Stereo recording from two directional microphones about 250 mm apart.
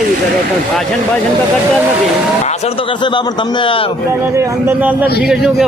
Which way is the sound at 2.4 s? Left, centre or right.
Left.